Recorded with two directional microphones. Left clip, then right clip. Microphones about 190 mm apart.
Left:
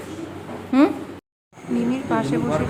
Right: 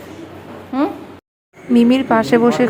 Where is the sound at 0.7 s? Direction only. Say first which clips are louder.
Left 2 dB; 25° left (ahead or behind).